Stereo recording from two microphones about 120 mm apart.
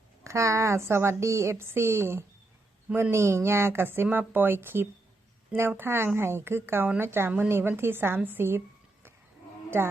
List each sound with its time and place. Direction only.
0.3 s a woman's voice: 25° right (ahead or behind)
9.6 s speech: 20° right (ahead or behind)